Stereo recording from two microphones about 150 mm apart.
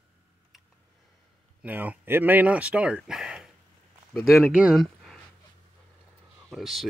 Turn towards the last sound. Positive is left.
turn(degrees=0)  # may be behind; listen again after turning